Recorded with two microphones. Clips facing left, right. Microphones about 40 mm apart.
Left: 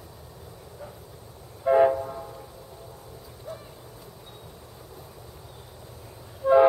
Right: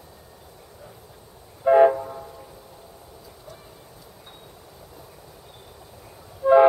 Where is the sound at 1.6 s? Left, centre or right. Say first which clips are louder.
Right 4 dB; centre.